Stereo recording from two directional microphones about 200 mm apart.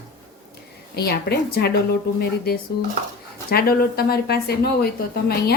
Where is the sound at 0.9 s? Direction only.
55° left (ahead or behind).